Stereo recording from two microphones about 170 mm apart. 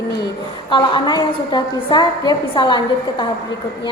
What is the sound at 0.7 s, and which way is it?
A woman's voice, 30° left (ahead or behind).